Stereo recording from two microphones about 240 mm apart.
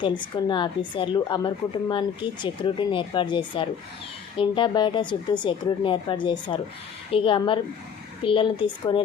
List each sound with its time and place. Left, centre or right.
0.0 s a woman's voice: centre